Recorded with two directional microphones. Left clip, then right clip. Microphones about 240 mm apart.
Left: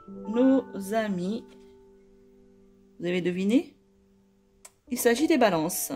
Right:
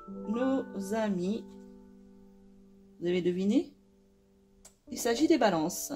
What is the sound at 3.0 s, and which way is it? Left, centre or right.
Speech, left.